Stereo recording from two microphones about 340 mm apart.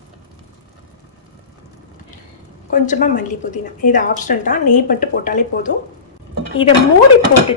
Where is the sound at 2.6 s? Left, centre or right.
Left.